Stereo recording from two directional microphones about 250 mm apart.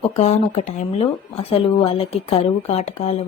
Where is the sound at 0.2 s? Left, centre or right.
Left.